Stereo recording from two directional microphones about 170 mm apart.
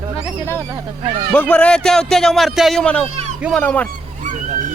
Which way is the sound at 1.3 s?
10° left (ahead or behind).